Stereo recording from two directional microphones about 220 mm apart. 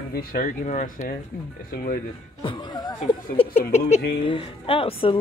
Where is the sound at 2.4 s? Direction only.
20° left (ahead or behind).